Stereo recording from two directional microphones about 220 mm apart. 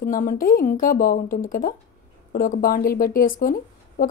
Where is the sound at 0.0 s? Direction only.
40° left (ahead or behind).